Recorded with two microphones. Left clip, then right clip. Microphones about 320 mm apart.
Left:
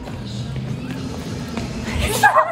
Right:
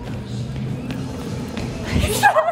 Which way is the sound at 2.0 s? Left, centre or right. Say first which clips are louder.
Left 2 dB; left.